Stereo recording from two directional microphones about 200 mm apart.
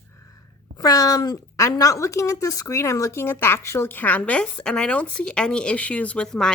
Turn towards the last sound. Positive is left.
turn(degrees=5)  # may be behind; listen again after turning